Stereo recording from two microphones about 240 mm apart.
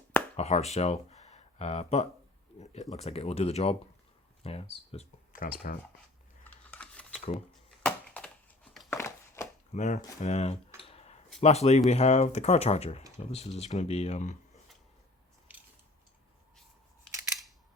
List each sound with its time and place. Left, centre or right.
0.3 s speech: left
6.4 s computer keyboard: centre
7.8 s crushing: centre
8.9 s a sound: centre
9.7 s speech: left
10.8 s a sound: left
11.3 s speech: left